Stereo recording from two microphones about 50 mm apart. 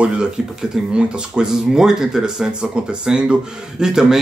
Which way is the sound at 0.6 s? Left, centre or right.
Centre.